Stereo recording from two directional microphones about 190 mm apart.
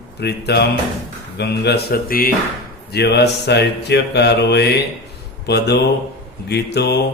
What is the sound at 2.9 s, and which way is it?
Music, 60° left (ahead or behind).